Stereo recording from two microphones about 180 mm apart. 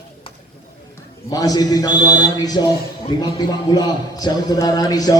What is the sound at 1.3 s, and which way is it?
A man's voice, 20° left (ahead or behind).